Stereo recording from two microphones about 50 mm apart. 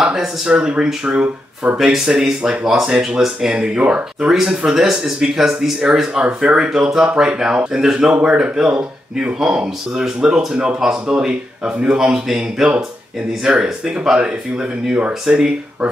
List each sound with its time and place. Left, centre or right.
0.0 s speech: centre
4.6 s speech: centre